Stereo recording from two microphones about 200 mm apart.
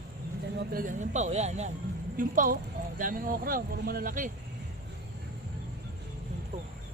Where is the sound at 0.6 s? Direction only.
45° right (ahead or behind).